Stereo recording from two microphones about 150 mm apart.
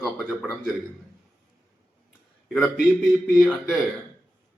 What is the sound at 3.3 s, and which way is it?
Speech, centre (ahead or behind).